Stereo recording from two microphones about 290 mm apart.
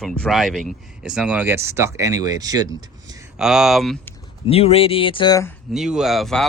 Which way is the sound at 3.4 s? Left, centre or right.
Centre.